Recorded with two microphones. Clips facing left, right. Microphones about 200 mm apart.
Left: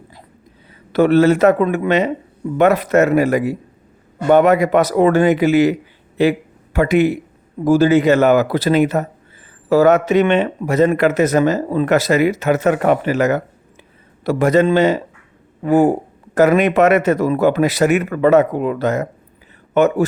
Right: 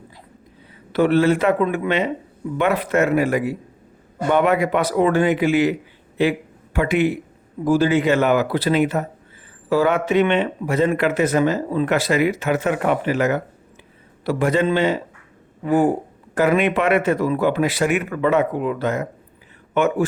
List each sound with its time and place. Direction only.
0.9 s a man's voice: 45° left (ahead or behind)